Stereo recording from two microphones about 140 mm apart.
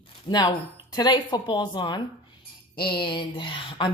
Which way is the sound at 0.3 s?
30° left (ahead or behind).